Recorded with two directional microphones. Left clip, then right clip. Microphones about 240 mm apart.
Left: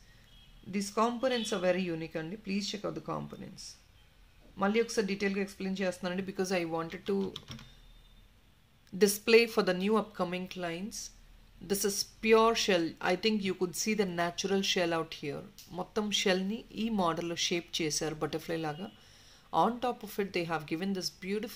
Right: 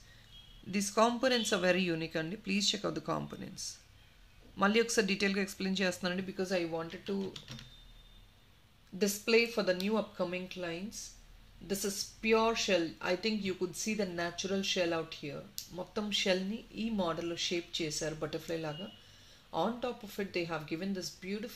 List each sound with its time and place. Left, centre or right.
0.7 s speech: centre
6.1 s speech: left
8.9 s speech: left